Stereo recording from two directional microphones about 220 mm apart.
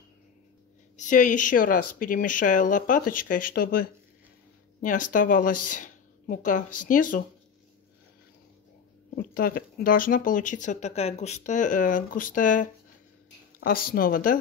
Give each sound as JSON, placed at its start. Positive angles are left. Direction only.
{"t": 0.9, "sound": "speech", "side_deg": 35}
{"t": 4.8, "sound": "a woman's voice", "side_deg": 35}
{"t": 9.1, "sound": "speech", "side_deg": 40}